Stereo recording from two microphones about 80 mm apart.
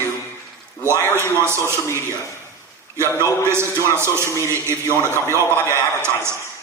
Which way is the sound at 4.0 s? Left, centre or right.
Right.